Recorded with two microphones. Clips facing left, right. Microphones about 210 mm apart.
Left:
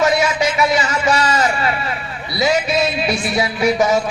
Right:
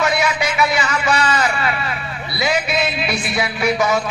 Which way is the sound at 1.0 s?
40° left (ahead or behind).